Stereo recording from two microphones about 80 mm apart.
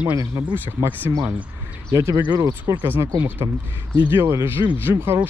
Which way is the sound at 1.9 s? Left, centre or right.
Right.